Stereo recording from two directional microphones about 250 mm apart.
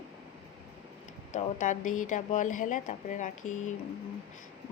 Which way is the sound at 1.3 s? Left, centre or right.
Left.